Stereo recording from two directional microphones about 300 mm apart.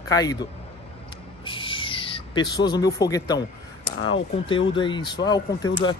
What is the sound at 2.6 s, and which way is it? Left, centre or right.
Speech, centre.